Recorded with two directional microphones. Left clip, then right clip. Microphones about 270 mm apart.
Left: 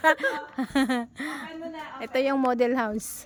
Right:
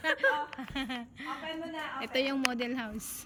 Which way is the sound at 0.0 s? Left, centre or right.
Centre.